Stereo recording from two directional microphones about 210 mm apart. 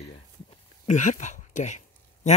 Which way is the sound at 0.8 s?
35° left (ahead or behind).